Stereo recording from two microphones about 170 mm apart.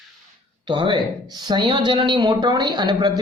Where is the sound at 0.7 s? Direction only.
30° right (ahead or behind).